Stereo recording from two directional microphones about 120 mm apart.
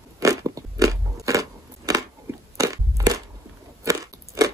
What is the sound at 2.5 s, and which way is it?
Crunch, 25° right (ahead or behind).